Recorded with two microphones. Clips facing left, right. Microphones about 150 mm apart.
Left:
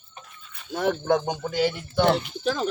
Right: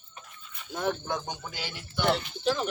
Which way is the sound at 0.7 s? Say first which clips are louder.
Left 8 dB; 85° left.